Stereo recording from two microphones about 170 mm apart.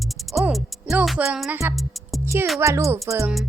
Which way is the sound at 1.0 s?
Centre (ahead or behind).